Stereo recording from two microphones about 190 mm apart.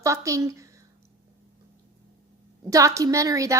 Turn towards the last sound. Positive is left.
turn(degrees=-15)  # may be behind; listen again after turning